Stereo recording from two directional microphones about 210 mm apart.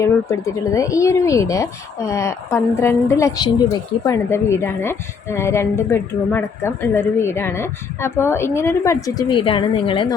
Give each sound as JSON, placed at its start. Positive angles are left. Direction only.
{"t": 0.0, "sound": "speech", "side_deg": 15}